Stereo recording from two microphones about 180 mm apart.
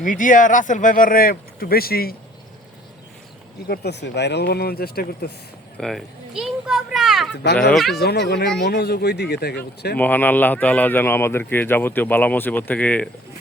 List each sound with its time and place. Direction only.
0.0 s speech: 45° left (ahead or behind)
3.7 s speech: 70° left (ahead or behind)
5.7 s speech: centre (ahead or behind)
7.9 s speech: 65° left (ahead or behind)
10.0 s speech: 10° left (ahead or behind)